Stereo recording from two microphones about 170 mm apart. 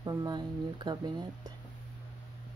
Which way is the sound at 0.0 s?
20° right (ahead or behind).